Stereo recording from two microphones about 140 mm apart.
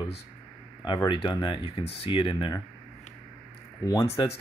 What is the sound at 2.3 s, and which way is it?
Speech, 25° left (ahead or behind).